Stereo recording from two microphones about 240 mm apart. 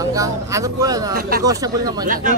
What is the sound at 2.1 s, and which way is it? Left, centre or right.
Speech, right.